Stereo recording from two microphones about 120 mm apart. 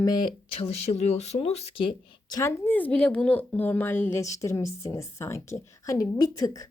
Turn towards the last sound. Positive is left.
turn(degrees=30)  # may be behind; listen again after turning